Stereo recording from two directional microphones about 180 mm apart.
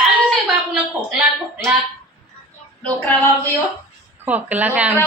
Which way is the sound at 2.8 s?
10° left (ahead or behind).